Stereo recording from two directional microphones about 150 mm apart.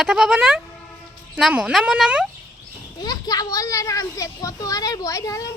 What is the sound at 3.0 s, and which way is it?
A child's voice, 25° left (ahead or behind).